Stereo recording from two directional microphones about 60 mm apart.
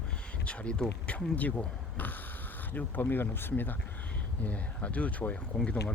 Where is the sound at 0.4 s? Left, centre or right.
Centre.